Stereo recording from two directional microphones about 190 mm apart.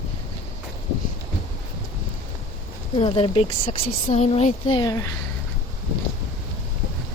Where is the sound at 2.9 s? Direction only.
30° left (ahead or behind).